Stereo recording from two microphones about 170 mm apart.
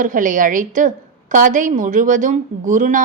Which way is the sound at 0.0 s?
50° right (ahead or behind).